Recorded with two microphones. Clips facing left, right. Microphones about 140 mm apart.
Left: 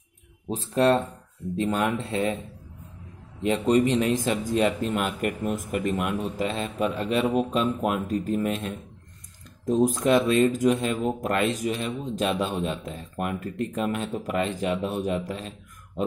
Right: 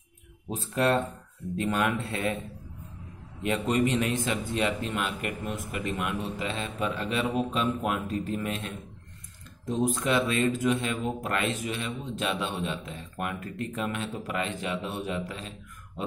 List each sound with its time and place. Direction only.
0.5 s a man's voice: 35° left (ahead or behind)
3.4 s a man's voice: 35° left (ahead or behind)